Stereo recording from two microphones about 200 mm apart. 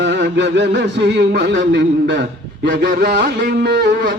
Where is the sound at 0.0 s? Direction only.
60° right (ahead or behind).